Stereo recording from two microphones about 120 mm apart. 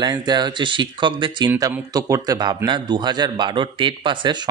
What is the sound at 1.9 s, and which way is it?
A man's voice, 30° right (ahead or behind).